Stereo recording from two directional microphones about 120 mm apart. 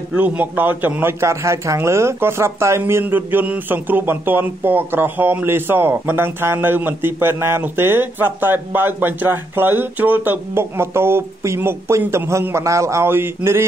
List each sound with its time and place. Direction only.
0.1 s a man's voice: 10° right (ahead or behind)